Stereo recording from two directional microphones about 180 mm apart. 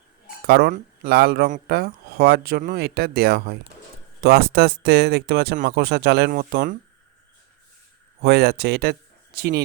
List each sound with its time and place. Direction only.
0.4 s speech: 65° right (ahead or behind)
8.2 s speech: 65° right (ahead or behind)